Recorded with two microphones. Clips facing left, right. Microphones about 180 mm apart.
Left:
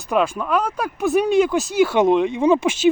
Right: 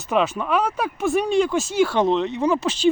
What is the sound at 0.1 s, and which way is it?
Speech, centre (ahead or behind).